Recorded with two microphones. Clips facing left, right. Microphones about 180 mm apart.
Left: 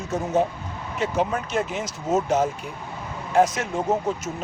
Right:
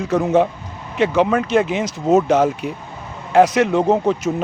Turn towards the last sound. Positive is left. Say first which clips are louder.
# right 8 dB
turn(degrees=-70)  # may be behind; listen again after turning